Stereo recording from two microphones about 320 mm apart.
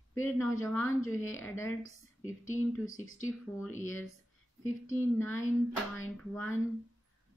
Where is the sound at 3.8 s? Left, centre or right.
Centre.